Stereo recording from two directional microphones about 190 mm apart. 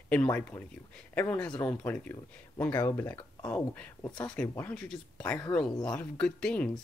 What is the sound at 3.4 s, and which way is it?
Speech, 5° left (ahead or behind).